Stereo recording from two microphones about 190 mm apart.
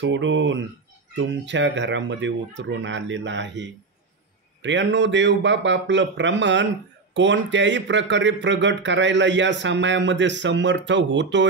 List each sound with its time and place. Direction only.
0.0 s speech: 75° right (ahead or behind)